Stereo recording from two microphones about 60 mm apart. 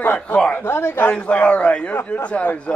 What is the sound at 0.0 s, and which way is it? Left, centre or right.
A man's voice, left.